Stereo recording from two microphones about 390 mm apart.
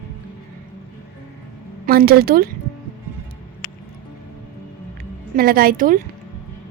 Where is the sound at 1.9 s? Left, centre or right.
Right.